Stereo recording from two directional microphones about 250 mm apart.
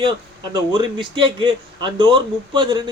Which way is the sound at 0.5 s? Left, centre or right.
Centre.